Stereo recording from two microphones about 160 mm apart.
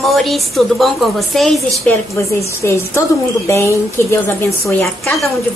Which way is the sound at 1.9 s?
15° left (ahead or behind).